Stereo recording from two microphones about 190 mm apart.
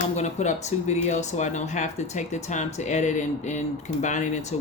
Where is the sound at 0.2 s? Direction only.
35° left (ahead or behind).